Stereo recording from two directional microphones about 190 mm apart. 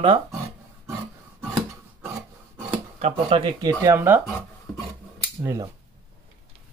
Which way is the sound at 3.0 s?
30° right (ahead or behind).